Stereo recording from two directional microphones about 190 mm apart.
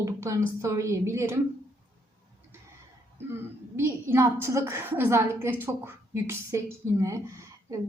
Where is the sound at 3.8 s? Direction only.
15° right (ahead or behind).